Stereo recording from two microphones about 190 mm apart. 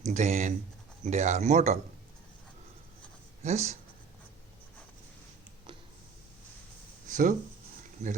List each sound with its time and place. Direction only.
0.0 s speech: 35° right (ahead or behind)
3.4 s speech: 35° right (ahead or behind)
7.1 s speech: 40° right (ahead or behind)